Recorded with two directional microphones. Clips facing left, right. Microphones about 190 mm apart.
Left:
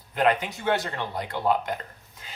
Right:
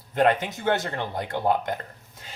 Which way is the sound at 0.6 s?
45° right (ahead or behind).